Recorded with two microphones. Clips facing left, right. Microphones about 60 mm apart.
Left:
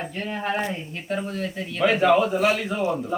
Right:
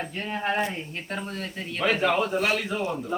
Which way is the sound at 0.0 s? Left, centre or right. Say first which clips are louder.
Left 2 dB; centre.